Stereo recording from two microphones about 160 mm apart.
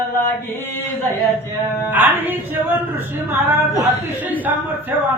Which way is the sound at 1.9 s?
10° right (ahead or behind).